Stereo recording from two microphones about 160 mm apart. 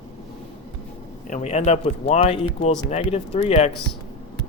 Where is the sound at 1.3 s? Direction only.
45° left (ahead or behind).